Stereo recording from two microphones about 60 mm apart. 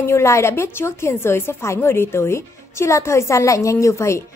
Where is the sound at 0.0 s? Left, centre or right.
Left.